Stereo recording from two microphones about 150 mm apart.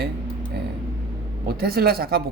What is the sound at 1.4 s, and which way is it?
Speech, 90° right.